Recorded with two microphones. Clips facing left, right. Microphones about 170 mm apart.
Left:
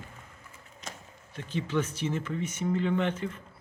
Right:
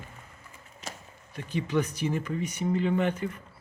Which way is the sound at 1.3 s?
10° right (ahead or behind).